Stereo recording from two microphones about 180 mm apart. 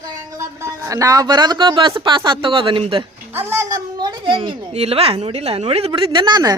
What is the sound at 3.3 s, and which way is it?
A woman's voice, 10° right (ahead or behind).